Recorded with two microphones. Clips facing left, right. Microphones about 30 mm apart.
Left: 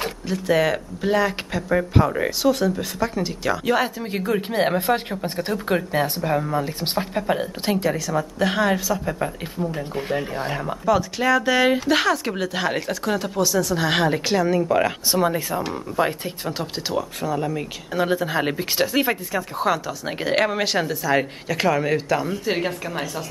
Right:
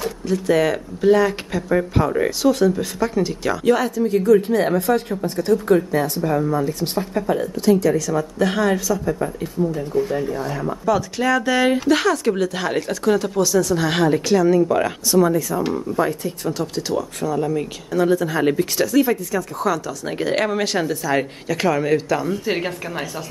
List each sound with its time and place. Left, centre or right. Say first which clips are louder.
0.3 s speech: right 2 dB; centre
3.9 s speech: right 9 dB; left
7.9 s speech: right 4 dB; centre
9.9 s speech: right 5 dB; left
10.9 s speech: even; centre
15.0 s speech: right 4 dB; left; by 17.6 s centre
17.9 s speech: right 3 dB; left
18.8 s speech: right 1 dB; left
20.1 s speech: right 1 dB; centre
22.4 s a woman's voice: right 1 dB; centre